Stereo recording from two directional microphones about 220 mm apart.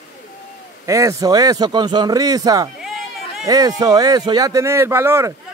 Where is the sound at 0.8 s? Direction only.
15° right (ahead or behind).